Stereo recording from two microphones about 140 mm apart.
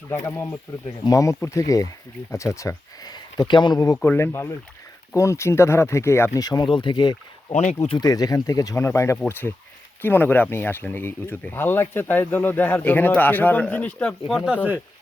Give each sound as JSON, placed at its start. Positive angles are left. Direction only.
{"t": 0.1, "sound": "speech", "side_deg": 15}
{"t": 3.9, "sound": "speech", "side_deg": 15}
{"t": 7.5, "sound": "speech", "side_deg": 50}
{"t": 7.9, "sound": "speech", "side_deg": 25}